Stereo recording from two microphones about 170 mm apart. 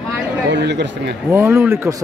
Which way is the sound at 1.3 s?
15° right (ahead or behind).